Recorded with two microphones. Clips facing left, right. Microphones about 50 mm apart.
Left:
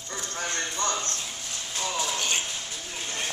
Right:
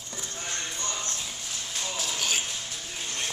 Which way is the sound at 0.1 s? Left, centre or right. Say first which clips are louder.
Left 5 dB; left.